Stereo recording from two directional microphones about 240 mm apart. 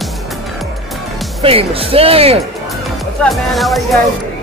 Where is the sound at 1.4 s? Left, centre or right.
Right.